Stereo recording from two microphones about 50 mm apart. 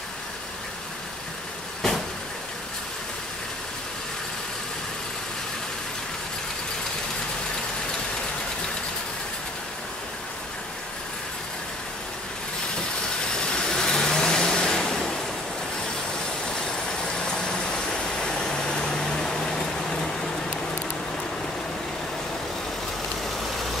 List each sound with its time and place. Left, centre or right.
13.3 s vehicle: centre
17.2 s vehicle: centre